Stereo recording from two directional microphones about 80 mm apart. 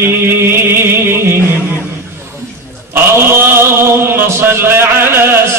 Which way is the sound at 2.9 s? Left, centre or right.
Right.